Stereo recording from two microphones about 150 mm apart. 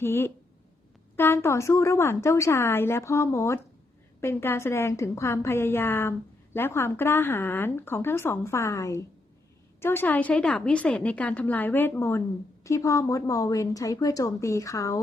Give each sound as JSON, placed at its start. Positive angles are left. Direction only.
{"t": 0.0, "sound": "a woman's voice", "side_deg": 15}